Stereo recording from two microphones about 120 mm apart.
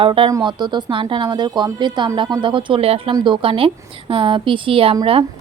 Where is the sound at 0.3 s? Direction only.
35° right (ahead or behind).